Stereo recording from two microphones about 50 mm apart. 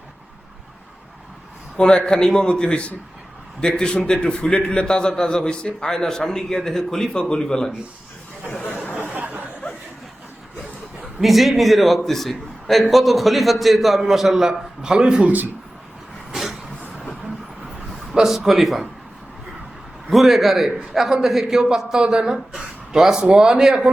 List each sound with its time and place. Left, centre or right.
1.7 s a man's voice: centre
9.1 s a sound: right
11.2 s a man's voice: centre
17.9 s a man's voice: centre
20.1 s a man's voice: centre